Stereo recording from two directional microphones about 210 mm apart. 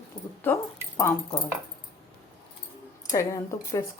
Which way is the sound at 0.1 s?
5° left (ahead or behind).